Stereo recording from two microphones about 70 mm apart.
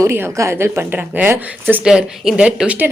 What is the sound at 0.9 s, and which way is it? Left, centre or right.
Speech, right.